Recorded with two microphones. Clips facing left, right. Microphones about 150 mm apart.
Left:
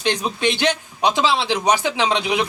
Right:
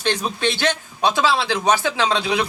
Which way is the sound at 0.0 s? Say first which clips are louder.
Left 1 dB; 15° left (ahead or behind).